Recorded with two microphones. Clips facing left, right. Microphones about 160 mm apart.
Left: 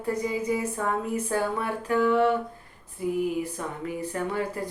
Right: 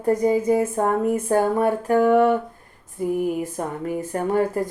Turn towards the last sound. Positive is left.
turn(degrees=-45)  # may be behind; listen again after turning